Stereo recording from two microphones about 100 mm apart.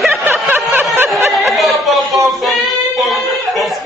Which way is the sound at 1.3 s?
Centre (ahead or behind).